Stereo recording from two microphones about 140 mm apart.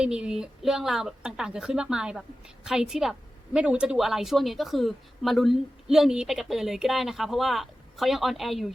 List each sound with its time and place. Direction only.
0.0 s a woman's voice: 5° right (ahead or behind)